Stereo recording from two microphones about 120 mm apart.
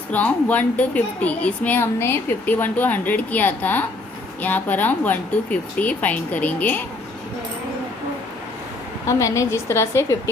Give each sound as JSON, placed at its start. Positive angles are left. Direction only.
{"t": 0.1, "sound": "a woman's voice", "side_deg": 10}
{"t": 9.0, "sound": "a woman's voice", "side_deg": 25}